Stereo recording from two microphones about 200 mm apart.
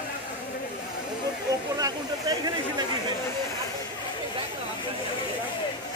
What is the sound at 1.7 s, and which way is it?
Speech, 20° right (ahead or behind).